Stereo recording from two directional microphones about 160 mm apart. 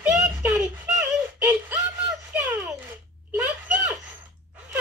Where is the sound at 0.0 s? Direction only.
5° right (ahead or behind).